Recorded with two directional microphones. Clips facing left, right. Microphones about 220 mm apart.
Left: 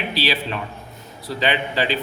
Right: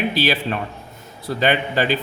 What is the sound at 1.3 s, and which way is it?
Speech, 50° right (ahead or behind).